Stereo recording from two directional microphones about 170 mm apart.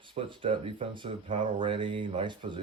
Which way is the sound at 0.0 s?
30° right (ahead or behind).